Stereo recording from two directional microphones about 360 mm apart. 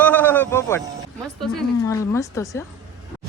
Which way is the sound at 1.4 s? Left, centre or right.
Centre.